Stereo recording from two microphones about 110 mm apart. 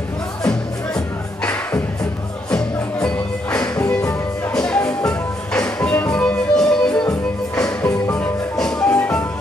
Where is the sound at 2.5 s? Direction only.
10° left (ahead or behind).